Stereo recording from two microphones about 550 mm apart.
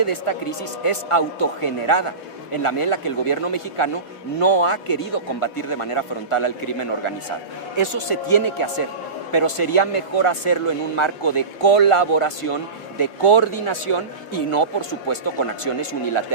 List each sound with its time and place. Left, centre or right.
0.0 s speech: left